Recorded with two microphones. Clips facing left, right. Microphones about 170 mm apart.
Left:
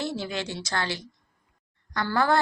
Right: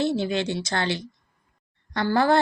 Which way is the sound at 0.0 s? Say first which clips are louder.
Right 7 dB; 20° right (ahead or behind).